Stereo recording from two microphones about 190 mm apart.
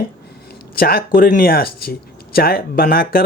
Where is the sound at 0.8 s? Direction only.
50° left (ahead or behind).